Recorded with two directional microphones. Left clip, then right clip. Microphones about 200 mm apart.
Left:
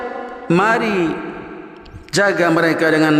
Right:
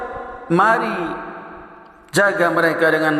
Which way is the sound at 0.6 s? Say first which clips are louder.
Right 1 dB; 35° left (ahead or behind).